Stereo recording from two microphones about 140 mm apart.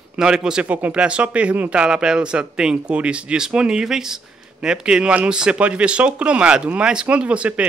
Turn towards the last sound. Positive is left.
turn(degrees=-10)  # may be behind; listen again after turning